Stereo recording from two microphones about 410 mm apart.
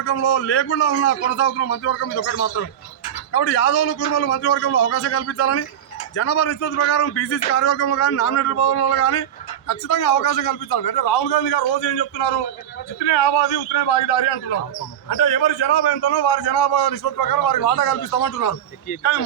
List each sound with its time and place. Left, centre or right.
0.0 s a man's voice: left
10.5 s a man's voice: left